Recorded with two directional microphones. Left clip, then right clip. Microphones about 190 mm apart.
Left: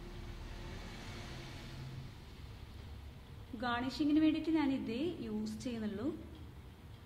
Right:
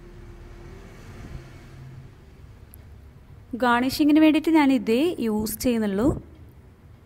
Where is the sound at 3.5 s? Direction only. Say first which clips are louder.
Right 16 dB; 50° right (ahead or behind).